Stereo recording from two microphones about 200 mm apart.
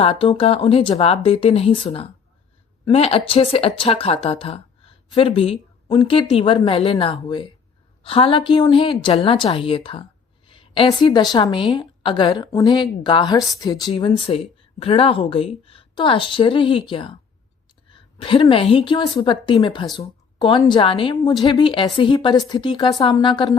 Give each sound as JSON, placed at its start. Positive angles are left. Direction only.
{"t": 0.0, "sound": "a woman's voice", "side_deg": 25}